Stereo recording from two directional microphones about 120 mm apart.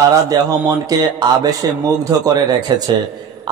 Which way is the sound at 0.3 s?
30° right (ahead or behind).